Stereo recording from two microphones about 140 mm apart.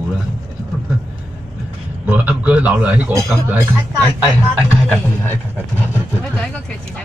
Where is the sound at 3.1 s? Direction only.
25° right (ahead or behind).